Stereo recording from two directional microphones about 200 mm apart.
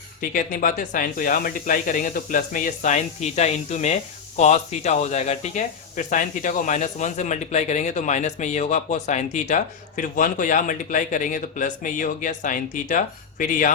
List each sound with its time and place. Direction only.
0.2 s speech: 40° left (ahead or behind)